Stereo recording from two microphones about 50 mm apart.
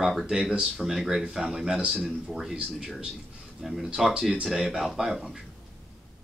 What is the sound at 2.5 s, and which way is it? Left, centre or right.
Speech, centre.